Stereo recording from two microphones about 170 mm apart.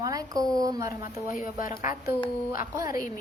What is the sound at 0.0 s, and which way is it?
Speech, 20° right (ahead or behind).